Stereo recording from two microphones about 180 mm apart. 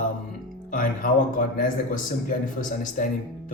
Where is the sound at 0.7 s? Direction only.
50° left (ahead or behind).